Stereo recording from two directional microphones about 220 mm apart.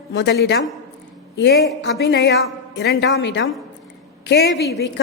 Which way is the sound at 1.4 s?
50° left (ahead or behind).